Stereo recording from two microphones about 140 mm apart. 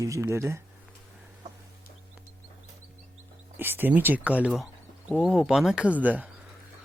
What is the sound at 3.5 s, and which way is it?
Speech, 15° right (ahead or behind).